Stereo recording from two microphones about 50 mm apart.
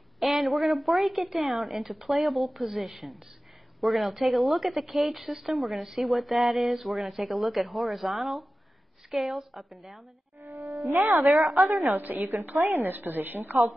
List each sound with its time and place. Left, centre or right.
0.2 s speech: centre
10.9 s speech: right
11.2 s speech: centre
11.9 s a woman's voice: right